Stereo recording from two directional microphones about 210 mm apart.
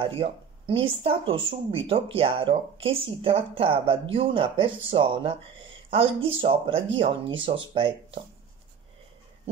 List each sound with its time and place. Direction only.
0.0 s speech: 25° right (ahead or behind)